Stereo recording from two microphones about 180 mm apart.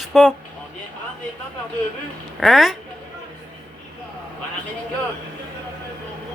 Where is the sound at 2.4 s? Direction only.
Centre (ahead or behind).